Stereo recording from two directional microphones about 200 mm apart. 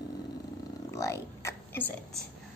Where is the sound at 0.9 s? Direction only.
15° left (ahead or behind).